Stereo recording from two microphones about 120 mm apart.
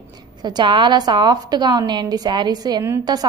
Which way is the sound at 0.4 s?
40° right (ahead or behind).